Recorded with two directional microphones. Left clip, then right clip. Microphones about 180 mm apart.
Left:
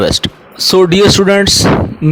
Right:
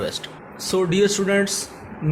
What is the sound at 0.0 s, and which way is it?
Speech, 55° left (ahead or behind).